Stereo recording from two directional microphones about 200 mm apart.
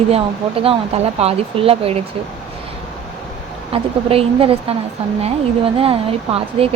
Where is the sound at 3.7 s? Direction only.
30° right (ahead or behind).